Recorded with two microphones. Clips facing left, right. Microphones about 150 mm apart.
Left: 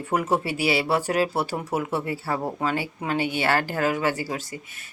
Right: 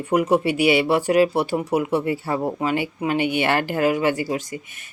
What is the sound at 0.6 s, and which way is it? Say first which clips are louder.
Speech: right 6 dB; 35° left (ahead or behind).